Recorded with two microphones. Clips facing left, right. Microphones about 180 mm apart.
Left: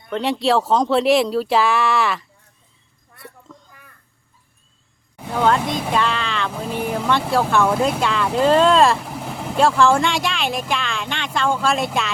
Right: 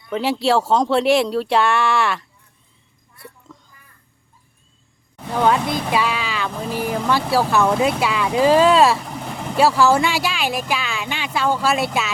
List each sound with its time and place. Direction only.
0.1 s speech: centre (ahead or behind)
3.7 s crow: 60° left (ahead or behind)
5.1 s speech: 5° left (ahead or behind)